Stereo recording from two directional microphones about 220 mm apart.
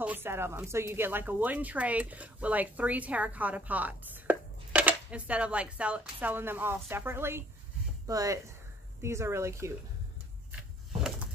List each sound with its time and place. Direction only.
0.0 s speech: 10° right (ahead or behind)